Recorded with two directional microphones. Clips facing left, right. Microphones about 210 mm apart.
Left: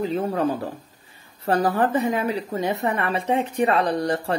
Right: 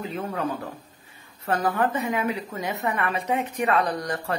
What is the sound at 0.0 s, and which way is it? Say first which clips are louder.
A woman's voice: left 6 dB; 35° left (ahead or behind).